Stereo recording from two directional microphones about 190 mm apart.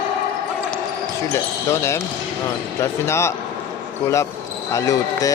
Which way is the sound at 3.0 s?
15° left (ahead or behind).